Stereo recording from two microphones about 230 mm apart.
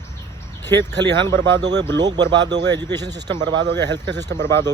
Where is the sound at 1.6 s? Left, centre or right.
Right.